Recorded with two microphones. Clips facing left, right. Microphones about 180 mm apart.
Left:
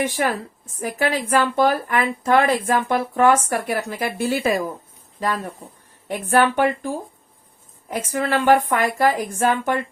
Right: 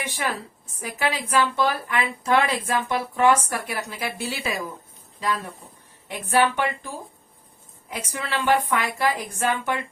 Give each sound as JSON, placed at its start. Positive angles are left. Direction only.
{"t": 0.0, "sound": "speech", "side_deg": 45}